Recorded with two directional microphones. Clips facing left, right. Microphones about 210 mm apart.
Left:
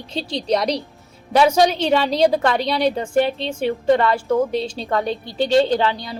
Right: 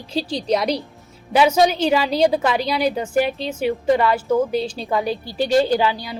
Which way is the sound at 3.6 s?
5° right (ahead or behind).